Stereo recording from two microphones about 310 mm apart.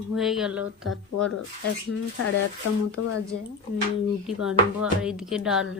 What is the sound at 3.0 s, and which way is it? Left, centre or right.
Speech, left.